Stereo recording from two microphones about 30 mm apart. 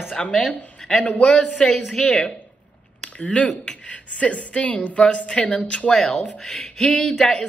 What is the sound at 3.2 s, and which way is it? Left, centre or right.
Speech, left.